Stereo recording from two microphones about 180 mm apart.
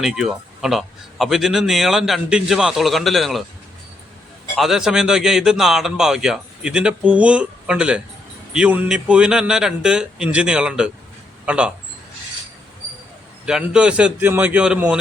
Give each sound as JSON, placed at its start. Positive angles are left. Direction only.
{"t": 0.0, "sound": "a man's voice", "side_deg": 0}
{"t": 4.5, "sound": "a man's voice", "side_deg": 0}
{"t": 13.4, "sound": "a man's voice", "side_deg": -5}